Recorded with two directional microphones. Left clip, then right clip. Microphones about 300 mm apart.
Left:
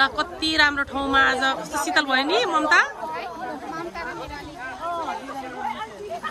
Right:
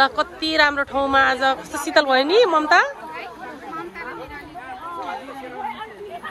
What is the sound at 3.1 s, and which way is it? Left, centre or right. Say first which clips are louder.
Chatter: left 3 dB; left.